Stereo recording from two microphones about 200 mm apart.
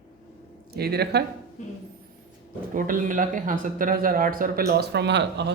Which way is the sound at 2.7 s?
45° right (ahead or behind).